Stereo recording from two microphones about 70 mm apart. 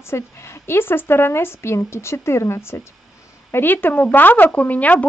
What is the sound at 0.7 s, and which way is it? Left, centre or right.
Speech, left.